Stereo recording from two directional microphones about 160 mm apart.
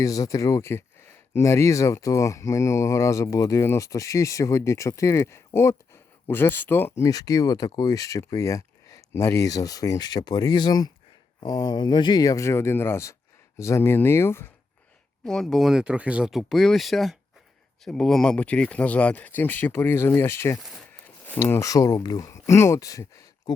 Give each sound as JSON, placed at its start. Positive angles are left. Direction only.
{"t": 0.0, "sound": "speech", "side_deg": 20}
{"t": 15.2, "sound": "speech", "side_deg": 5}